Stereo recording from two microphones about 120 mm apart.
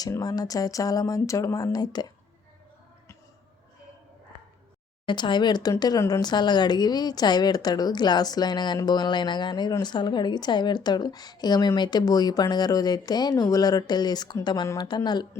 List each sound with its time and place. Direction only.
0.1 s speech: 30° left (ahead or behind)
5.0 s speech: 40° left (ahead or behind)